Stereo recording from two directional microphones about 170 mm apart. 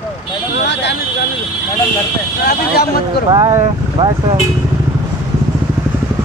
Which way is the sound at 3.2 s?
25° right (ahead or behind).